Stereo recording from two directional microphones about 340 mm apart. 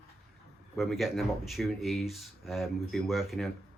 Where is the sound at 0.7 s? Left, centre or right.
Centre.